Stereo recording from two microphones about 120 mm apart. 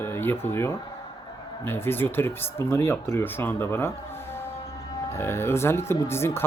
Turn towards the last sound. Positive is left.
turn(degrees=20)  # may be behind; listen again after turning